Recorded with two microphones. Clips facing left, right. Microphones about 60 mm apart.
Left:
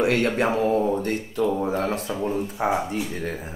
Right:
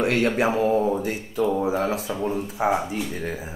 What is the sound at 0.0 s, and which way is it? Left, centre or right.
Speech, centre.